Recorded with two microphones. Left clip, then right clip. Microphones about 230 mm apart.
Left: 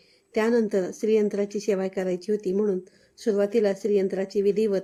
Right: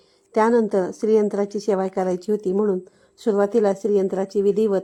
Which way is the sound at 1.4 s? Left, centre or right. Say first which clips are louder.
Right 3 dB; centre.